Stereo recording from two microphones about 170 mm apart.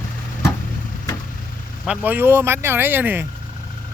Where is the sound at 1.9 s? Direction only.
10° right (ahead or behind).